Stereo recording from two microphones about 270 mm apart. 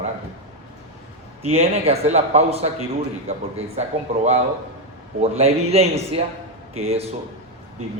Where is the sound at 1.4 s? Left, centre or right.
Right.